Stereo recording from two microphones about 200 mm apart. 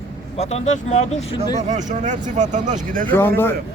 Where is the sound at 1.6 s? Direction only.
35° right (ahead or behind).